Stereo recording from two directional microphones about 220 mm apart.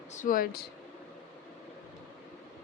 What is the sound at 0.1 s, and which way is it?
Speech, 35° left (ahead or behind).